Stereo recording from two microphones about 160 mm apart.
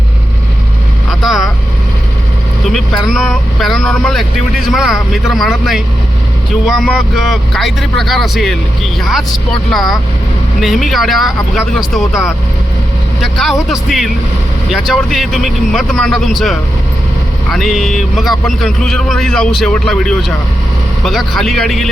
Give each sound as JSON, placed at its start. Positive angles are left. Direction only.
{"t": 1.2, "sound": "vehicle", "side_deg": 0}
{"t": 2.6, "sound": "a man's voice", "side_deg": 0}
{"t": 13.2, "sound": "speech", "side_deg": 0}